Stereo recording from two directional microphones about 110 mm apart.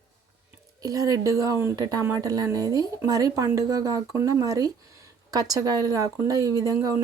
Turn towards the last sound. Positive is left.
turn(degrees=-35)  # may be behind; listen again after turning